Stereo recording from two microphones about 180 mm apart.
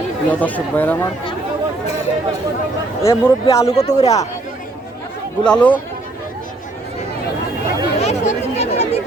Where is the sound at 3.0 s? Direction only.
15° left (ahead or behind).